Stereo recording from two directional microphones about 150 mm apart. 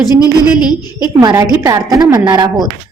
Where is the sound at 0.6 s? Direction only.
30° left (ahead or behind).